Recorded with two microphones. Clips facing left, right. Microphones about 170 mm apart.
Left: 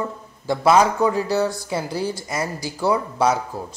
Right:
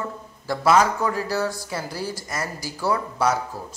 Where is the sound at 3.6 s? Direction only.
55° left (ahead or behind).